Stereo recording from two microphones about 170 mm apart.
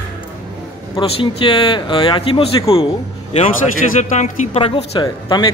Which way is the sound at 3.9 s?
45° left (ahead or behind).